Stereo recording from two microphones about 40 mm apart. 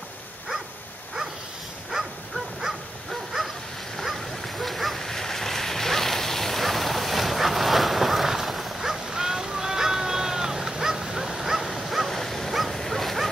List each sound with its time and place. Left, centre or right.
1.9 s dog: centre
2.6 s bow-wow: centre
4.0 s dog: centre
9.1 s a sound: centre